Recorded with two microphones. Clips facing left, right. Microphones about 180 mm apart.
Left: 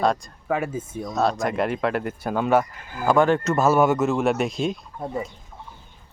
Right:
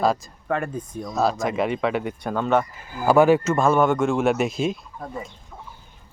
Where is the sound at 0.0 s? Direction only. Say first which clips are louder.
Even; centre (ahead or behind).